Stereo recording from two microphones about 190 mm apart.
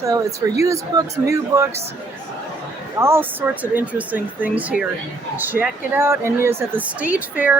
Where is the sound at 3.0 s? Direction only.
10° right (ahead or behind).